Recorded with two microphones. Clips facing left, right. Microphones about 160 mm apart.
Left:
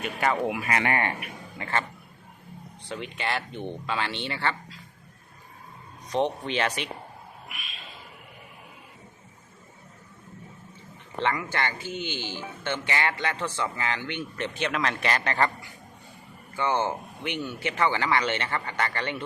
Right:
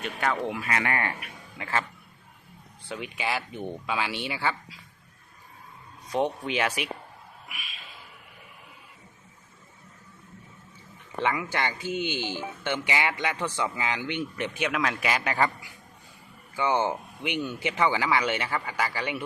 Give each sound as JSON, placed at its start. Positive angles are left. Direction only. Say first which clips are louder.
{"t": 0.0, "sound": "speech", "louder": "left 2 dB", "side_deg": 5}
{"t": 0.7, "sound": "speech", "louder": "left 1 dB", "side_deg": 25}
{"t": 1.5, "sound": "speech", "louder": "even", "side_deg": 0}
{"t": 2.8, "sound": "speech", "louder": "even", "side_deg": 0}
{"t": 6.1, "sound": "speech", "louder": "left 1 dB", "side_deg": -5}
{"t": 7.4, "sound": "a sound", "louder": "left 1 dB", "side_deg": 0}
{"t": 11.2, "sound": "speech", "louder": "even", "side_deg": -10}
{"t": 16.6, "sound": "speech", "louder": "right 1 dB", "side_deg": -15}